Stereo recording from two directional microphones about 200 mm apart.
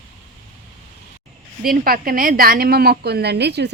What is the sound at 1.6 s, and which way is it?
A woman's voice, 45° right (ahead or behind).